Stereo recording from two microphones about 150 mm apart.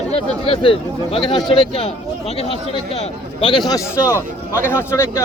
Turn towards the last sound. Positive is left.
turn(degrees=20)  # may be behind; listen again after turning